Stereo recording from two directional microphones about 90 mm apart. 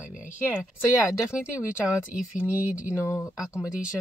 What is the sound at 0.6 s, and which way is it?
Speech, 10° right (ahead or behind).